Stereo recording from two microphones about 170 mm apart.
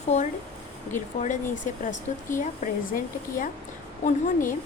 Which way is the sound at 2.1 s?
45° left (ahead or behind).